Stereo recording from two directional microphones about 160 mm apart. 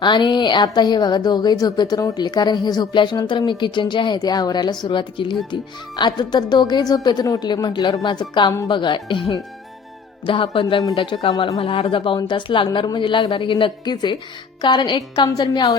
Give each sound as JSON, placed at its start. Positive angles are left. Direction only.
{"t": 0.0, "sound": "a woman's voice", "side_deg": 30}